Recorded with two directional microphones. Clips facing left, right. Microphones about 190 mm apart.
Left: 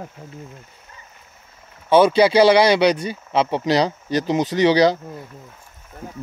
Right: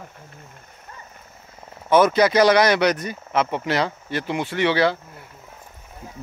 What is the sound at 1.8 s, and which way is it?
Speech, 30° left (ahead or behind).